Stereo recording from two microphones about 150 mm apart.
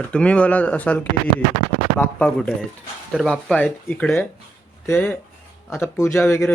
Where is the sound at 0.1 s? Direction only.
5° left (ahead or behind).